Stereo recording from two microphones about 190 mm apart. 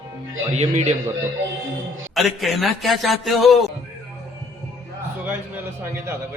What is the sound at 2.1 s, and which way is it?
A man's voice, centre (ahead or behind).